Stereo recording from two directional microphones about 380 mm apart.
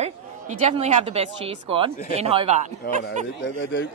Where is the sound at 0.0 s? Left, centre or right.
Centre.